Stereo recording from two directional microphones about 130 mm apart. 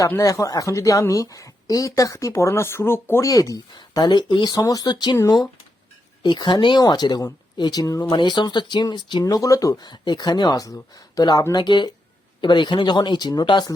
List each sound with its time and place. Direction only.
0.0 s a woman's voice: 25° left (ahead or behind)
8.1 s speech: 35° left (ahead or behind)